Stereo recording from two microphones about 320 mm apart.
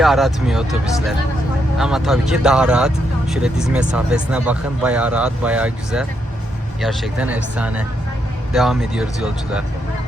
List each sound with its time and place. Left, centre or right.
0.0 s speech: centre
1.8 s speech: centre